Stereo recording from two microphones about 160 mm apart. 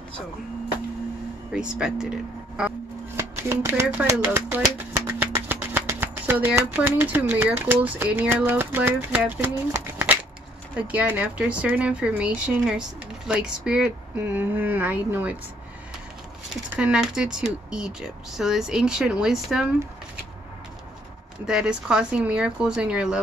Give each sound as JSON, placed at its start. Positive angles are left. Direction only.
{"t": 1.5, "sound": "speech", "side_deg": -5}
{"t": 3.2, "sound": "speech", "side_deg": -15}
{"t": 16.7, "sound": "speech", "side_deg": -5}
{"t": 21.5, "sound": "speech", "side_deg": -5}